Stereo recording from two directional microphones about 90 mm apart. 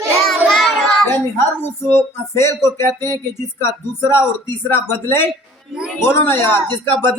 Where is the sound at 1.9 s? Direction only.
30° left (ahead or behind).